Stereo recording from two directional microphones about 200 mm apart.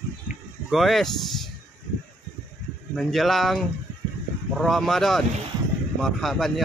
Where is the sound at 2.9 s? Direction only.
Centre (ahead or behind).